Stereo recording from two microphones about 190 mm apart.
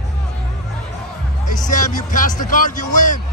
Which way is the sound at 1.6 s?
40° left (ahead or behind).